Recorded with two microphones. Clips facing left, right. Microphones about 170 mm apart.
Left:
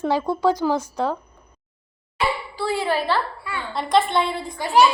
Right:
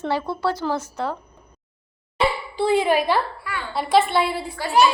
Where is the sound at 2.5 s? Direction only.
20° right (ahead or behind).